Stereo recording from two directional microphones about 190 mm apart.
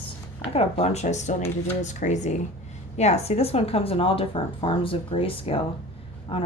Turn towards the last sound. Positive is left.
turn(degrees=30)  # may be behind; listen again after turning